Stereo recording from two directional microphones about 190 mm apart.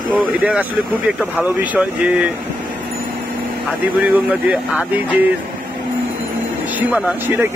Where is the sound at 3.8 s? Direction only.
10° right (ahead or behind).